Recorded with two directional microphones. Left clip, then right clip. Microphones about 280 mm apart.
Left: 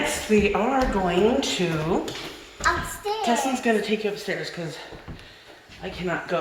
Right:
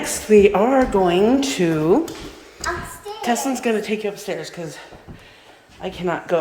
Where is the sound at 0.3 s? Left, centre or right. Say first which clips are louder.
Right 9 dB; right.